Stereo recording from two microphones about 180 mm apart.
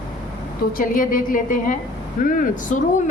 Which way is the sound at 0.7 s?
50° left (ahead or behind).